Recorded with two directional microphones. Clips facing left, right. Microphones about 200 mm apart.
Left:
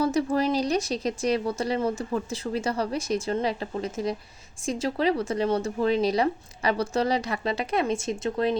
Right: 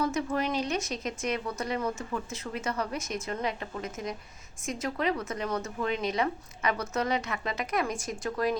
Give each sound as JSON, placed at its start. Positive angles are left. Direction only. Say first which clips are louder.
{"t": 0.0, "sound": "speech", "louder": "left 5 dB", "side_deg": 35}